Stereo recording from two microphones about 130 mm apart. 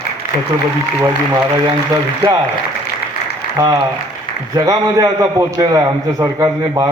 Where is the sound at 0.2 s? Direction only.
90° left.